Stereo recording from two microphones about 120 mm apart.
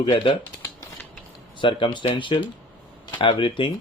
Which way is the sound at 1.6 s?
45° left (ahead or behind).